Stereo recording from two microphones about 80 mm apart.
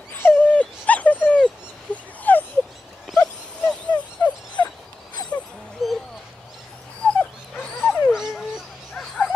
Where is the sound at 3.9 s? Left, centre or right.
Left.